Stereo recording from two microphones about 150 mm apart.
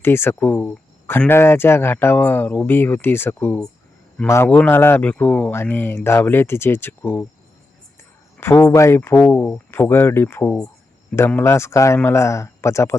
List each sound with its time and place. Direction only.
0.0 s speech: 15° left (ahead or behind)
8.4 s speech: 15° left (ahead or behind)